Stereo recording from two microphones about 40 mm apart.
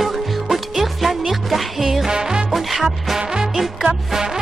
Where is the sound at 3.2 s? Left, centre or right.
Centre.